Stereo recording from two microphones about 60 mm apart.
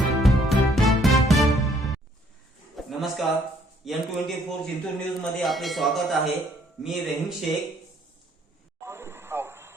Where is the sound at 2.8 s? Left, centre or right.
Centre.